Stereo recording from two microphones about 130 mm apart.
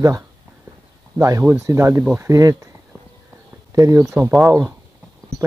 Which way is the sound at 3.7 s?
20° right (ahead or behind).